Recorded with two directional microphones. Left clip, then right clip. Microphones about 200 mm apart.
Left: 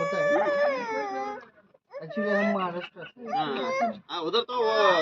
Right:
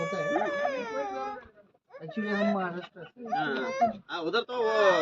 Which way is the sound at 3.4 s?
5° right (ahead or behind).